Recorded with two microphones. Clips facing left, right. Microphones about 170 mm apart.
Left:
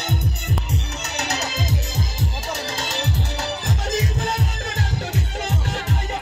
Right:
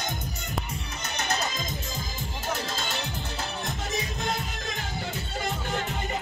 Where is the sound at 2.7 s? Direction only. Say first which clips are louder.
Left 6 dB; 80° left.